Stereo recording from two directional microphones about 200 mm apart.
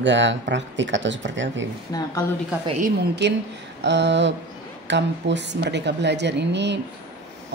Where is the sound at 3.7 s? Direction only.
60° right (ahead or behind).